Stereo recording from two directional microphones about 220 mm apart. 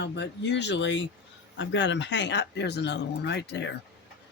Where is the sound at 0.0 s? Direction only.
50° left (ahead or behind).